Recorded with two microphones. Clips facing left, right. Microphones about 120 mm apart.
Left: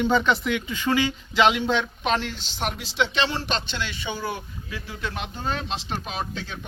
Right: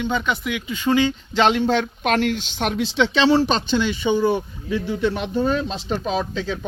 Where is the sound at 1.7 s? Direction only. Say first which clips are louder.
Right 4 dB; 55° right (ahead or behind).